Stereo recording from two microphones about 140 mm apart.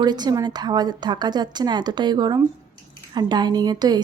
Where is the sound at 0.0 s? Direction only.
30° right (ahead or behind).